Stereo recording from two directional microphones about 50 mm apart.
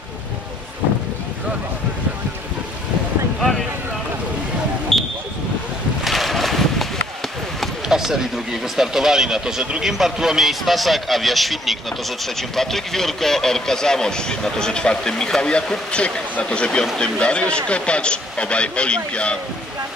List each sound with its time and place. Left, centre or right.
3.3 s boat: centre
4.9 s vehicle: centre
6.0 s a sound: centre
7.9 s a sound: centre
8.7 s speech: centre
15.9 s speech: left